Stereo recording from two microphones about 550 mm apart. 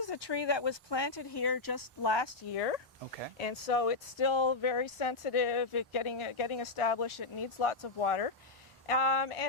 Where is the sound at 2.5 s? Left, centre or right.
Left.